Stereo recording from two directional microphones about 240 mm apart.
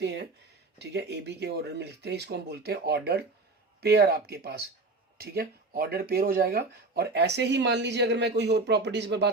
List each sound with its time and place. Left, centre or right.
0.0 s speech: right